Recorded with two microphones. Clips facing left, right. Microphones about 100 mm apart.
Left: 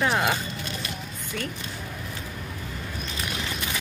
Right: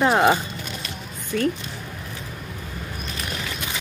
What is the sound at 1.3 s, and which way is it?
Speech, 50° right (ahead or behind).